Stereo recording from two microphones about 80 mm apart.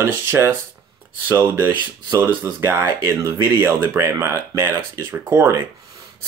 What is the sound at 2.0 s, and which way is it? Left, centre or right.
Speech, right.